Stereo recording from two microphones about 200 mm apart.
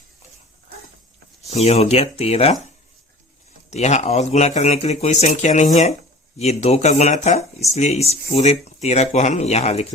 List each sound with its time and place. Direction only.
1.5 s speech: 30° left (ahead or behind)
3.7 s speech: 35° left (ahead or behind)